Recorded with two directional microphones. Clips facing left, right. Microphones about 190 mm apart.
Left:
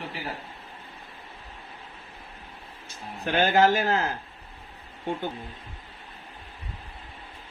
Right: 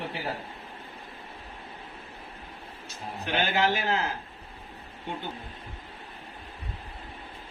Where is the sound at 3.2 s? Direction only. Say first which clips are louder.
Left 6 dB; 45° left (ahead or behind).